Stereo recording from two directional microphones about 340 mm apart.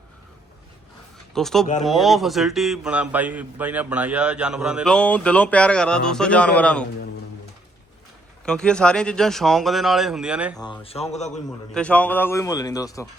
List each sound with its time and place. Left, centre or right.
1.3 s a man's voice: centre
8.4 s a man's voice: centre
10.6 s a man's voice: centre
11.7 s a man's voice: centre